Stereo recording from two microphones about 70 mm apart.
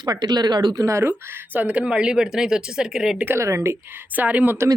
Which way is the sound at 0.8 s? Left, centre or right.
Right.